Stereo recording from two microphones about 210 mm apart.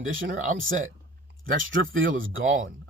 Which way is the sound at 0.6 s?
70° right (ahead or behind).